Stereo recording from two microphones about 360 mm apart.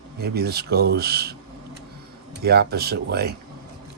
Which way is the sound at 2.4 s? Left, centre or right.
Right.